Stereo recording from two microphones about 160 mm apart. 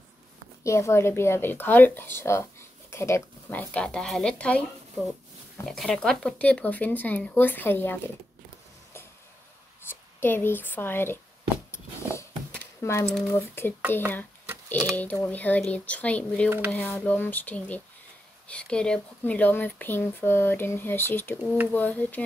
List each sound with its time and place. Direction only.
0.7 s speech: 20° left (ahead or behind)
9.8 s speech: 15° left (ahead or behind)
11.7 s a sound: 15° left (ahead or behind)
13.3 s speech: 15° left (ahead or behind)
14.9 s speech: 10° left (ahead or behind)
16.4 s speech: 10° right (ahead or behind)
16.7 s speech: 10° left (ahead or behind)